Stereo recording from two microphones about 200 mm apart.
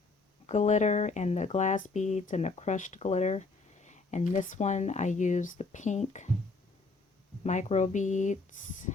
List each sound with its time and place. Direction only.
0.4 s speech: 35° left (ahead or behind)
7.4 s speech: 35° left (ahead or behind)